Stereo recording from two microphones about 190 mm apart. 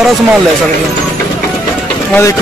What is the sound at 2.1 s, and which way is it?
Speech, 15° left (ahead or behind).